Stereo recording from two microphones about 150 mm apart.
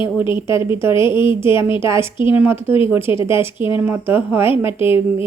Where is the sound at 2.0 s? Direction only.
35° left (ahead or behind).